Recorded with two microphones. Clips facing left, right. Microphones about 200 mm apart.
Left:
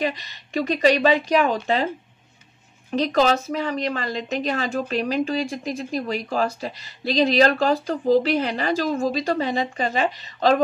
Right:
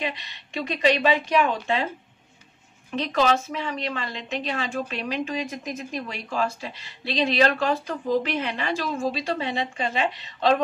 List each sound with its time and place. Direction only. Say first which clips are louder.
0.0 s a woman's voice: left 5 dB; 40° left (ahead or behind)
2.9 s a woman's voice: left 3 dB; 40° left (ahead or behind)